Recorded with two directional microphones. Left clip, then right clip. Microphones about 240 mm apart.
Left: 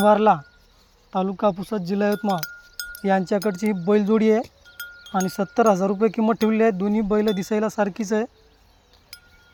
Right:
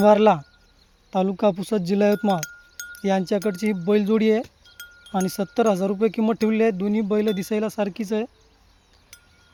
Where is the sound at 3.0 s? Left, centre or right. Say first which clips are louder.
Left 1 dB; centre.